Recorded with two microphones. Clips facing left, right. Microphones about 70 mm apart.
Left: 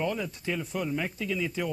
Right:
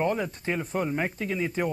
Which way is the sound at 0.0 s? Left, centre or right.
Right.